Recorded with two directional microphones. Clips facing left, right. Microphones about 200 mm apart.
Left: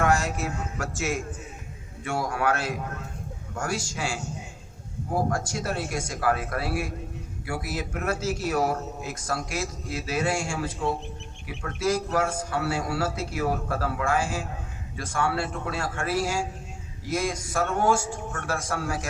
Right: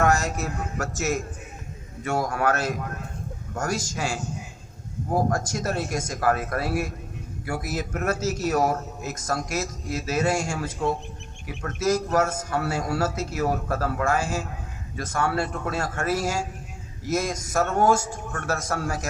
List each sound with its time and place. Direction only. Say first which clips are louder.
0.0 s a man's voice: right 2 dB; 45° right (ahead or behind)